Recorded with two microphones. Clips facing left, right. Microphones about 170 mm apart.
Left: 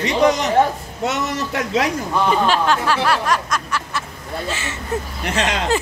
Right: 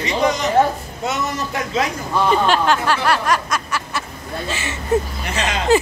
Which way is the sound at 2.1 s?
Centre (ahead or behind).